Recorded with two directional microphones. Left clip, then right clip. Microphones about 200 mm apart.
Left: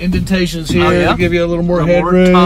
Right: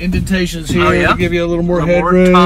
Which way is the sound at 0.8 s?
10° left (ahead or behind).